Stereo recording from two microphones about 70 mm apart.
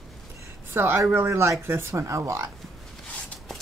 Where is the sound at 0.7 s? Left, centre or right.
Right.